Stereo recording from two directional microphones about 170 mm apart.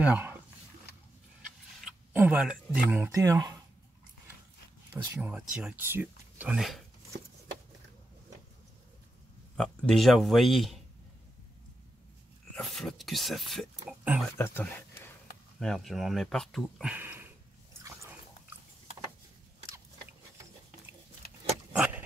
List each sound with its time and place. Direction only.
0.0 s dog: 10° right (ahead or behind)
1.4 s a sound: 5° right (ahead or behind)
3.1 s speech: 20° right (ahead or behind)
4.9 s speech: 15° right (ahead or behind)
9.6 s speech: centre (ahead or behind)
12.5 s speech: centre (ahead or behind)
14.3 s speech: 15° left (ahead or behind)
15.6 s speech: centre (ahead or behind)
16.9 s a sound: 10° right (ahead or behind)
21.7 s keys jangling: 5° right (ahead or behind)